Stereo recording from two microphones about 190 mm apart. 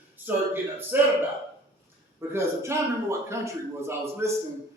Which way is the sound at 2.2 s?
15° right (ahead or behind).